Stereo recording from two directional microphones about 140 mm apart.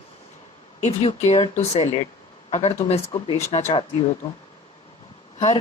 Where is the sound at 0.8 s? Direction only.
50° left (ahead or behind).